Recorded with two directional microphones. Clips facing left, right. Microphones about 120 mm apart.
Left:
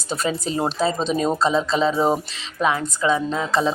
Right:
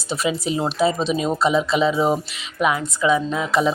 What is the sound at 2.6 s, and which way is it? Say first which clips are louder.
Speech: right 1 dB; 30° left (ahead or behind).